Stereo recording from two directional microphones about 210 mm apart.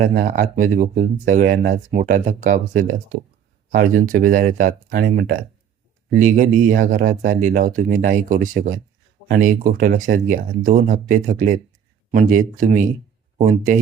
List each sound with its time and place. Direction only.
0.0 s speech: 40° right (ahead or behind)
4.1 s speech: 40° right (ahead or behind)